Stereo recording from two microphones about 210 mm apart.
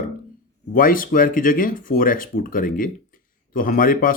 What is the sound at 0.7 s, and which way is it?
Speech, 40° left (ahead or behind).